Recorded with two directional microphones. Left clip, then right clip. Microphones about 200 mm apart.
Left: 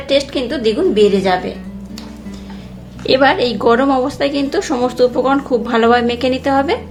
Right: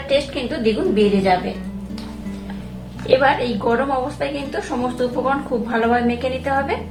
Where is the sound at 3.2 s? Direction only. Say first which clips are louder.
Left 5 dB; 55° left (ahead or behind).